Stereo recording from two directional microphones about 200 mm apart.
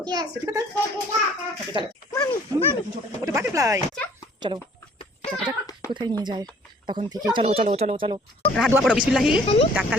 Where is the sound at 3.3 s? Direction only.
15° right (ahead or behind).